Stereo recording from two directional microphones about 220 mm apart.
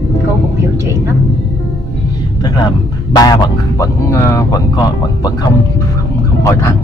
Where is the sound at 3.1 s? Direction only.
15° left (ahead or behind).